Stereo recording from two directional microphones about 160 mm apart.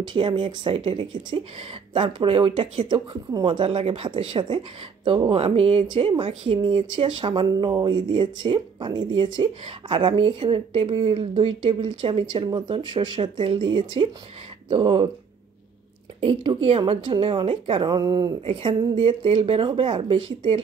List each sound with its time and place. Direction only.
0.0 s a woman's voice: 30° right (ahead or behind)
16.2 s a woman's voice: 35° right (ahead or behind)